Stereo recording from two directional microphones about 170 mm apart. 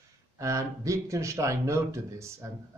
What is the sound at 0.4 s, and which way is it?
Speech, 20° right (ahead or behind).